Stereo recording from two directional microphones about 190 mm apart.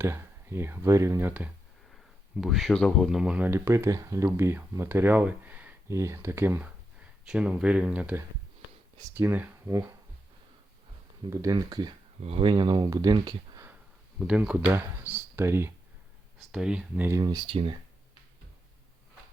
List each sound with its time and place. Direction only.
0.0 s speech: 15° right (ahead or behind)
2.4 s speech: centre (ahead or behind)
11.3 s speech: 20° right (ahead or behind)
14.2 s speech: 5° right (ahead or behind); by 17.7 s 25° right (ahead or behind)